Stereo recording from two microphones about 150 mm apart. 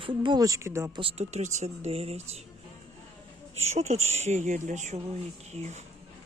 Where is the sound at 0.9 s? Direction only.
40° right (ahead or behind).